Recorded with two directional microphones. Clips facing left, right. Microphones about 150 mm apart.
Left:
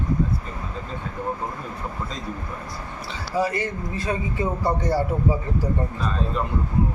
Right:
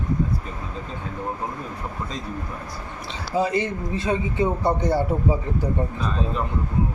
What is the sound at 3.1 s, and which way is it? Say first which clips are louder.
A man's voice: right 1 dB; 20° right (ahead or behind).